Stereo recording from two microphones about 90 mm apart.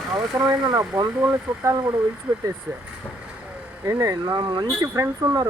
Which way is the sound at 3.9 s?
40° right (ahead or behind).